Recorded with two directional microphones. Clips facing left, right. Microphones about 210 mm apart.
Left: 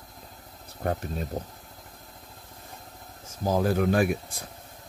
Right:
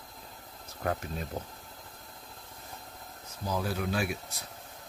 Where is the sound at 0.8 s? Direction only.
35° left (ahead or behind).